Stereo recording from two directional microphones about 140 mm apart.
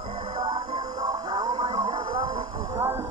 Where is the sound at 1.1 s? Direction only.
30° right (ahead or behind).